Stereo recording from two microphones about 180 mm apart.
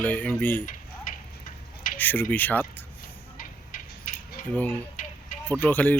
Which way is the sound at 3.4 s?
50° left (ahead or behind).